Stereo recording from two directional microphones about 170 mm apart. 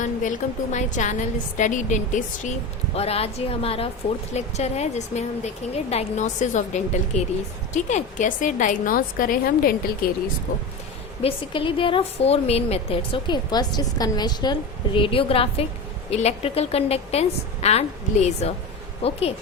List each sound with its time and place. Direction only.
0.0 s a woman's voice: 50° left (ahead or behind)
2.9 s a woman's voice: 35° left (ahead or behind); by 10.1 s 60° left (ahead or behind)
11.2 s a woman's voice: 30° left (ahead or behind)